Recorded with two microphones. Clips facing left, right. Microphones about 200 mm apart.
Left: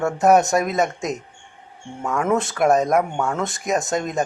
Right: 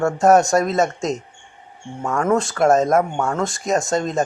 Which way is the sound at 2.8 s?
Centre (ahead or behind).